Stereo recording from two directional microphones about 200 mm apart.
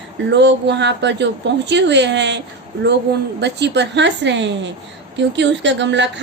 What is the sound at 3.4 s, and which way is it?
Speech, 60° right (ahead or behind).